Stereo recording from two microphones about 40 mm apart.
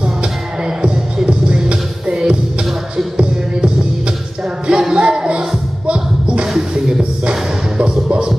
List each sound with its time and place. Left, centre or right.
0.0 s music: right
4.6 s music: right